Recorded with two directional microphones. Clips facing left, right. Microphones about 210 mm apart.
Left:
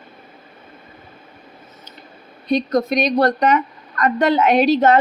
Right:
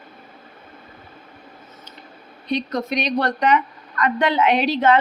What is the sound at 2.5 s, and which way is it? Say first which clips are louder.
A woman's voice: left 6 dB; 40° left (ahead or behind).